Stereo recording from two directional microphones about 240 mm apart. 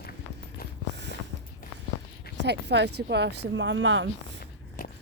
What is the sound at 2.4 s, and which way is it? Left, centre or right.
Speech, right.